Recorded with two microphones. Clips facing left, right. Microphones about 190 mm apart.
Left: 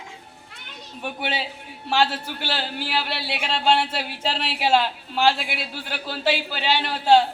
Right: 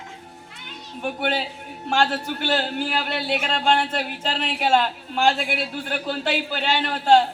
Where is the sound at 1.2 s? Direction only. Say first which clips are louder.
Right 3 dB; 45° right (ahead or behind).